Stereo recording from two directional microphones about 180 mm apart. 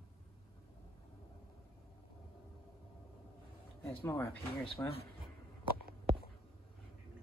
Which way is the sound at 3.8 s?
10° left (ahead or behind).